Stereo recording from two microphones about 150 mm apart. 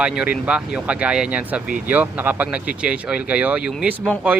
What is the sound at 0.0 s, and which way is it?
A man's voice, 5° right (ahead or behind).